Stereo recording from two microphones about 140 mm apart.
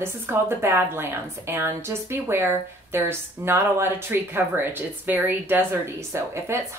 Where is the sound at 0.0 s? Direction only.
15° right (ahead or behind).